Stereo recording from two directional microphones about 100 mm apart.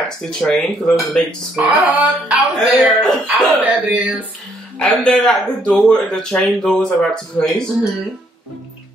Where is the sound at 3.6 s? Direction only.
15° right (ahead or behind).